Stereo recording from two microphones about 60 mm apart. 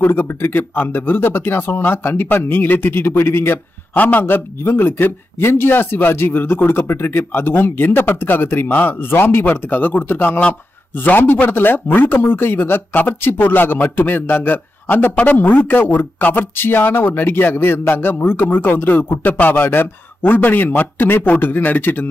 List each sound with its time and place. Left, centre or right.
0.0 s a man's voice: left